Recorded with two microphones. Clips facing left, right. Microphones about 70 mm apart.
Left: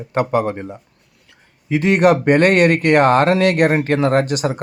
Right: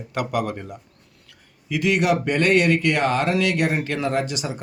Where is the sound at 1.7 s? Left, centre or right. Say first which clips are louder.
Left 7 dB; left.